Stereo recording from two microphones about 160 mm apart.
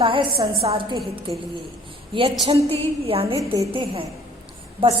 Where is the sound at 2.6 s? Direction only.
35° right (ahead or behind).